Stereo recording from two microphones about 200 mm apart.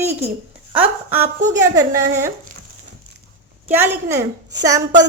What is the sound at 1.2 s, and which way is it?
Speech, 35° right (ahead or behind).